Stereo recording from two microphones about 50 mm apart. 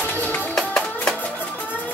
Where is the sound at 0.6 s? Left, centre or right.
Centre.